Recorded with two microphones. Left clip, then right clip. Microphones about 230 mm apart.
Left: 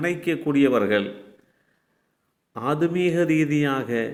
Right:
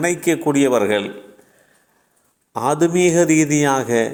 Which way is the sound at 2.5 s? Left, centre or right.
Centre.